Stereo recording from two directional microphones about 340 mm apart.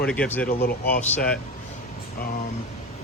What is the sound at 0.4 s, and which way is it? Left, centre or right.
Speech, left.